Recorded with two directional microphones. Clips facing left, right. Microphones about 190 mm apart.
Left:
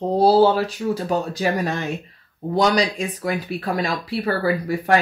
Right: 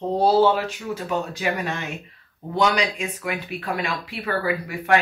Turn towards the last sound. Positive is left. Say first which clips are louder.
# left 2 dB
turn(degrees=35)  # may be behind; listen again after turning